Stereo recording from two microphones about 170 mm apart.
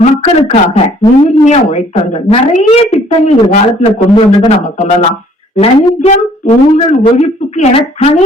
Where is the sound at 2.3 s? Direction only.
40° left (ahead or behind).